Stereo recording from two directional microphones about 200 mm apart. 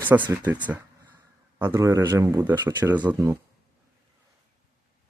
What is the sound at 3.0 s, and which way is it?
Speech, 10° right (ahead or behind).